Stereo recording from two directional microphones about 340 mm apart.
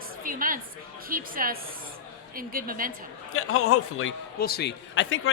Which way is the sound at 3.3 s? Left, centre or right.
Left.